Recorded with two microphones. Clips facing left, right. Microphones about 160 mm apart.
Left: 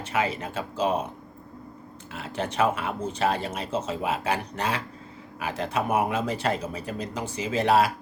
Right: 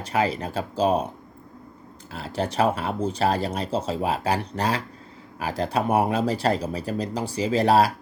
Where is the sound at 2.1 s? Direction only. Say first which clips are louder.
Right 2 dB; 35° right (ahead or behind).